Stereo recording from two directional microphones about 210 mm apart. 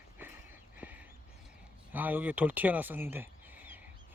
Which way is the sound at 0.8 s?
10° right (ahead or behind).